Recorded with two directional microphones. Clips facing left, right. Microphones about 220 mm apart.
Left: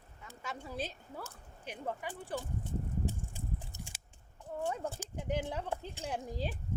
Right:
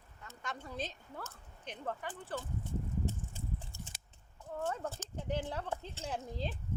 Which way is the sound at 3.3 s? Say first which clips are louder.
Left 1 dB; 15° left (ahead or behind).